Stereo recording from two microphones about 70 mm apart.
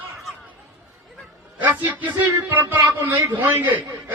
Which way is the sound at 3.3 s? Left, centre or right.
Right.